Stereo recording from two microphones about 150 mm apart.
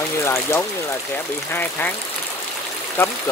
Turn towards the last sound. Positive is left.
turn(degrees=15)  # may be behind; listen again after turning